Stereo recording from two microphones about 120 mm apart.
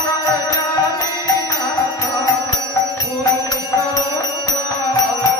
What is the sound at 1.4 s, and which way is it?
Music, 35° left (ahead or behind).